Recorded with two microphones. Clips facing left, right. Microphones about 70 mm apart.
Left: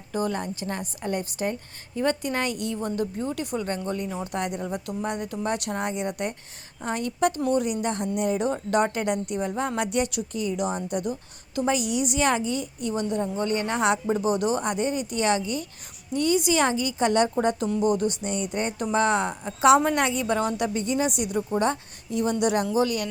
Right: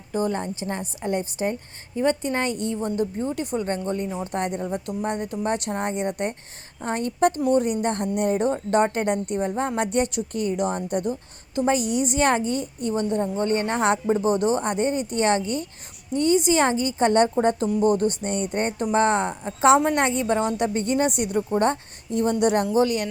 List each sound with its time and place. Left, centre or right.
0.1 s a woman's voice: right
10.3 s a woman's voice: right
16.1 s a woman's voice: right
20.6 s a woman's voice: right